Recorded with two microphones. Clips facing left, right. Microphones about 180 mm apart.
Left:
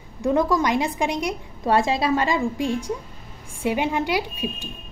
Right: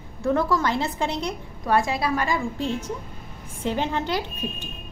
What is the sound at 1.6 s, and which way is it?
A woman's voice, 25° left (ahead or behind).